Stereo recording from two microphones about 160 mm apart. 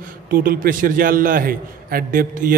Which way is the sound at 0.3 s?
60° right (ahead or behind).